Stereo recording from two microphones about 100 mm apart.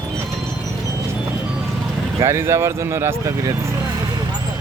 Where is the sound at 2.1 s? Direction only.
30° right (ahead or behind).